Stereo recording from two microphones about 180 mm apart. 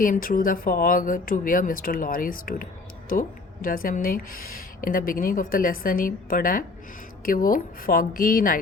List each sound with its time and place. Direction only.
0.0 s speech: 50° left (ahead or behind)